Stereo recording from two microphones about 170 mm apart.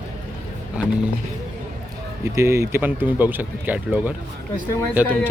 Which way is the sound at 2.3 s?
15° right (ahead or behind).